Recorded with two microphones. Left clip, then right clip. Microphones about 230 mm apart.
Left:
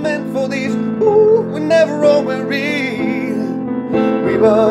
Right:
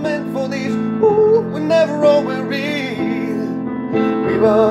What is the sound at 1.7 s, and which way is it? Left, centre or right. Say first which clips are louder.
Music: left 1 dB; centre.